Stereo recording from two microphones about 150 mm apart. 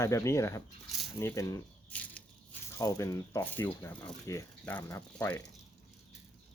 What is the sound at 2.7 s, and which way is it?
Speech, 20° left (ahead or behind).